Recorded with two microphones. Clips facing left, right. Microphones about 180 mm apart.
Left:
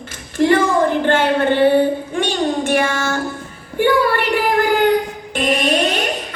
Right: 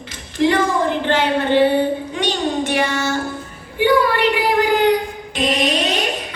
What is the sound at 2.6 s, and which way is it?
Child singing, 50° left (ahead or behind).